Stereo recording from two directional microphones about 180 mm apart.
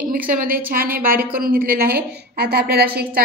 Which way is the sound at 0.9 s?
55° right (ahead or behind).